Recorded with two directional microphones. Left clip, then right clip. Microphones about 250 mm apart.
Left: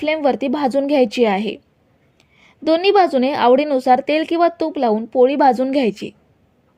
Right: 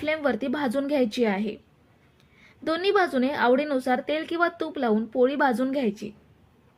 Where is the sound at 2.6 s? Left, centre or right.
Left.